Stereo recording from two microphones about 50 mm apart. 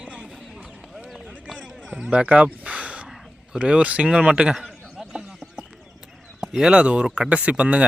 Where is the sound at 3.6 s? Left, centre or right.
Right.